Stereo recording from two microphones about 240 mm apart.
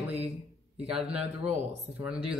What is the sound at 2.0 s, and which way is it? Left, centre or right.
Speech, centre.